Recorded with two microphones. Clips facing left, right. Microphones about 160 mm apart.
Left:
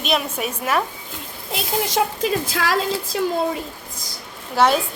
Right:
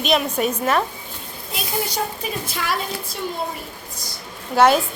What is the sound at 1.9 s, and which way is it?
Speech, 90° left.